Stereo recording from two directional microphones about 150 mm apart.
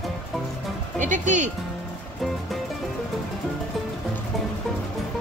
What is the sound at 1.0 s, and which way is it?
Speech, 55° right (ahead or behind).